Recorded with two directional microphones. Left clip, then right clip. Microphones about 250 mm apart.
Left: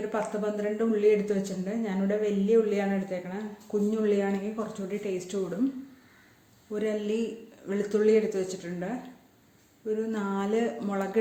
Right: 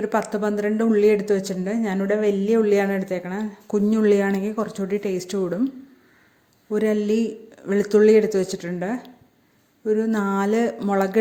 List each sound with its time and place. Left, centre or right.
0.1 s speech: right
6.7 s speech: right